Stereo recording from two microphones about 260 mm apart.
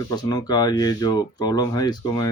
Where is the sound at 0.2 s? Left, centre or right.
Centre.